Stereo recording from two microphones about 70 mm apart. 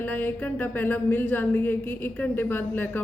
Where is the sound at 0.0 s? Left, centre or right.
Left.